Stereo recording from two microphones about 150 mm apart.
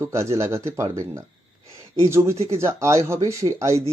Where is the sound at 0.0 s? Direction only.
20° right (ahead or behind).